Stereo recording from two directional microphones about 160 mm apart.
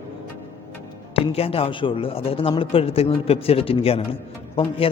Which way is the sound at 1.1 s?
35° left (ahead or behind).